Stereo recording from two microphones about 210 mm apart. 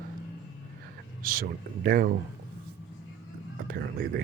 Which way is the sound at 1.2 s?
45° right (ahead or behind).